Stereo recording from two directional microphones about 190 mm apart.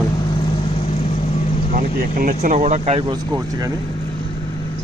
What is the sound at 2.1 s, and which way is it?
Speech, 40° right (ahead or behind).